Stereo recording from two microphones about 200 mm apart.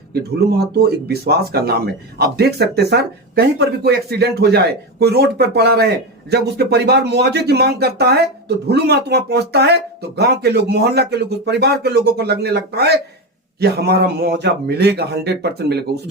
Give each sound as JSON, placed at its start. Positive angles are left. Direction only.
{"t": 0.1, "sound": "speech", "side_deg": -55}